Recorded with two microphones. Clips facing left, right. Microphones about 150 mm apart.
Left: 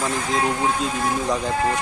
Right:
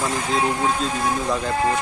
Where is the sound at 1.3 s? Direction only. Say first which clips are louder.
Right 1 dB; 10° left (ahead or behind).